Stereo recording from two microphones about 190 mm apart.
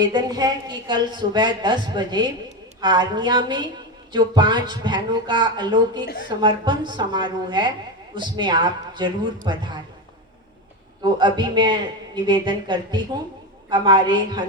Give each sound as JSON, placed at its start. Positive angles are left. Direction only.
{"t": 0.0, "sound": "a woman's voice", "side_deg": -20}
{"t": 11.0, "sound": "a woman's voice", "side_deg": -25}